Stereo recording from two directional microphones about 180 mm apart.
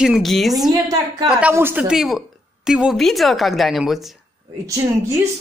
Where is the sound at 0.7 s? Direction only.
20° right (ahead or behind).